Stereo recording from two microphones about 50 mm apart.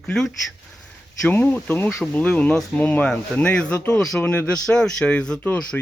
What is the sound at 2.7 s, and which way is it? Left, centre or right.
Speech, left.